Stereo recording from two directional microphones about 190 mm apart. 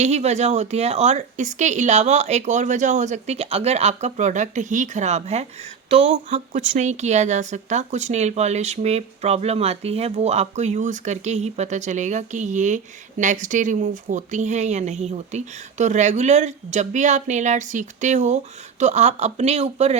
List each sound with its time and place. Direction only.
0.0 s speech: 35° right (ahead or behind)